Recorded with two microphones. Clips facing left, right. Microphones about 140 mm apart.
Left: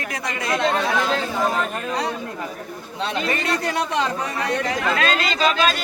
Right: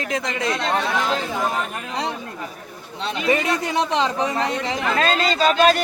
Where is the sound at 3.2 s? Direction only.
15° right (ahead or behind).